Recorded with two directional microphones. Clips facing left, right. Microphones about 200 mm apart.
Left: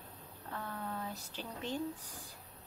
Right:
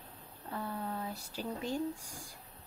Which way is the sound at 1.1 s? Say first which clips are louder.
Right 5 dB; 10° right (ahead or behind).